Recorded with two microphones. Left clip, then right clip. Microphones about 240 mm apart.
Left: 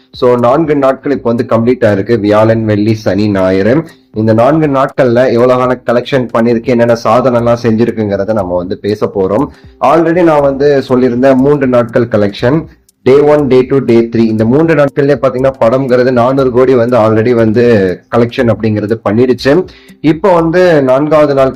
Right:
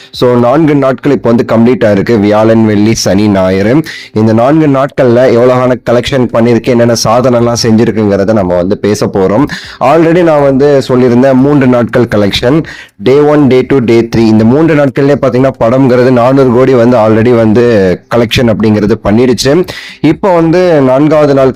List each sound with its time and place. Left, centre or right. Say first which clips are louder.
0.2 s speech: right 1 dB; right